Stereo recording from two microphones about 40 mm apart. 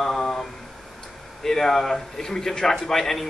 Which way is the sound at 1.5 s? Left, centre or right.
Centre.